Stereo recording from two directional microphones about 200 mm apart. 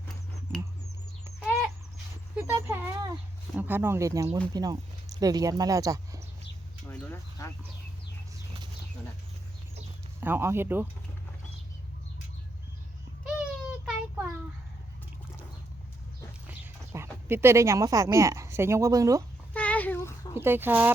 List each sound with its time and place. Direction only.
1.2 s bird: 5° right (ahead or behind)
2.3 s a sound: 10° right (ahead or behind)
3.5 s speech: 10° right (ahead or behind)
6.8 s speech: 10° left (ahead or behind)
10.2 s speech: 10° right (ahead or behind)
13.2 s child singing: 5° right (ahead or behind)
16.5 s speech: 10° right (ahead or behind)
19.5 s a sound: 5° left (ahead or behind)
20.3 s speech: 10° right (ahead or behind)